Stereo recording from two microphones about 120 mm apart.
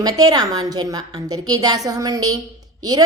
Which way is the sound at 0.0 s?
30° right (ahead or behind).